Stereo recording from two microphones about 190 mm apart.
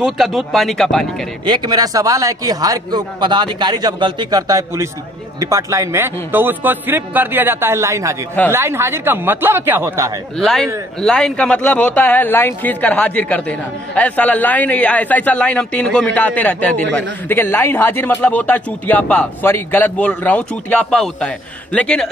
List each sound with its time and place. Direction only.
0.0 s speech: centre (ahead or behind)
1.4 s a man's voice: 25° right (ahead or behind)
10.4 s speech: centre (ahead or behind)